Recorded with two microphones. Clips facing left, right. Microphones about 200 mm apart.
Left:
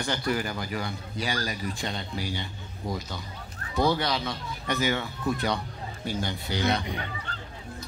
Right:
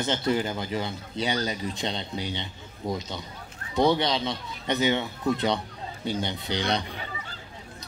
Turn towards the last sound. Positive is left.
turn(degrees=-5)  # may be behind; listen again after turning